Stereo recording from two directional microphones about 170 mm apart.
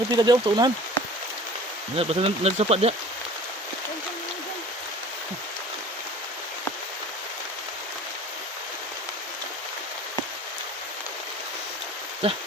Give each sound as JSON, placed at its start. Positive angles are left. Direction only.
{"t": 0.1, "sound": "speech", "side_deg": -25}
{"t": 2.0, "sound": "speech", "side_deg": -35}
{"t": 12.2, "sound": "speech", "side_deg": -35}